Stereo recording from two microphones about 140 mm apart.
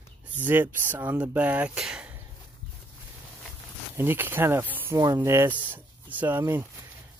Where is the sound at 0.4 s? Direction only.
15° right (ahead or behind).